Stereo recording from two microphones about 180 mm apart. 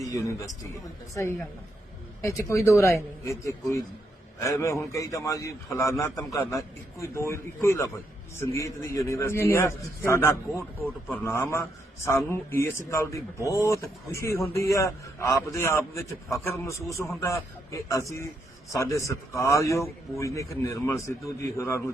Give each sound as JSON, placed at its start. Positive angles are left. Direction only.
{"t": 0.1, "sound": "a man's voice", "side_deg": 20}